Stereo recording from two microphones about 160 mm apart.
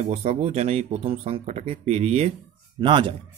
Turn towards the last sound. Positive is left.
turn(degrees=-30)  # may be behind; listen again after turning